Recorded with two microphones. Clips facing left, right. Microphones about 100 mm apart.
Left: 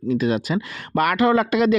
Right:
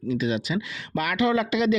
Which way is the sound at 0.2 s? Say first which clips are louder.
Left 4 dB; 50° left (ahead or behind).